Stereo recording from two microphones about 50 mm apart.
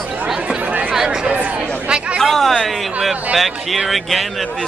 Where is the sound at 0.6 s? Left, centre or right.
Right.